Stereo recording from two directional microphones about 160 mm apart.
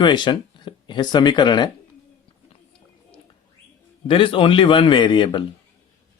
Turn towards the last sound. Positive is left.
turn(degrees=30)  # may be behind; listen again after turning